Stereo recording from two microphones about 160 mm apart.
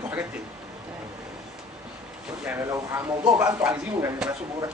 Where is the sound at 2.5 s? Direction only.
15° right (ahead or behind).